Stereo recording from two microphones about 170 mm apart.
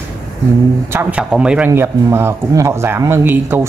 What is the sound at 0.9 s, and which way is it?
A man's voice, 10° right (ahead or behind).